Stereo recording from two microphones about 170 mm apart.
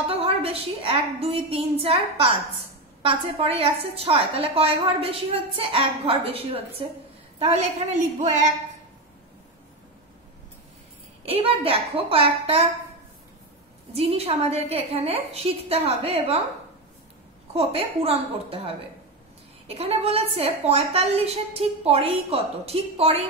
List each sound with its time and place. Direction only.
0.0 s a woman's voice: 35° right (ahead or behind)
11.2 s a woman's voice: 35° right (ahead or behind)
13.9 s a woman's voice: 35° right (ahead or behind)
17.6 s a woman's voice: 35° right (ahead or behind)